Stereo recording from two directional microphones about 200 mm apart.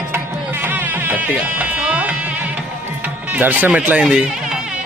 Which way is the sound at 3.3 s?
10° right (ahead or behind).